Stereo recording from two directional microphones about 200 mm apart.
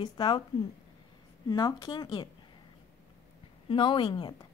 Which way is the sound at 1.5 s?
20° left (ahead or behind).